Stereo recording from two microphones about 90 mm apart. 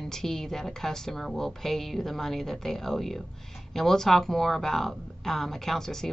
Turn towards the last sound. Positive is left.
turn(degrees=5)  # may be behind; listen again after turning